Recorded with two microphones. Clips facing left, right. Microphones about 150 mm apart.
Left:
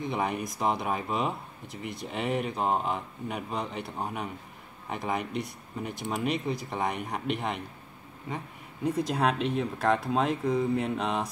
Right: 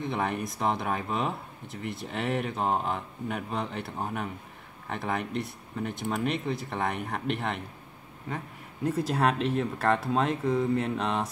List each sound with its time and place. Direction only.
0.0 s speech: centre (ahead or behind)
8.8 s speech: 5° right (ahead or behind)